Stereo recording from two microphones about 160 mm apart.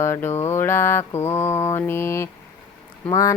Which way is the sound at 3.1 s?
20° left (ahead or behind).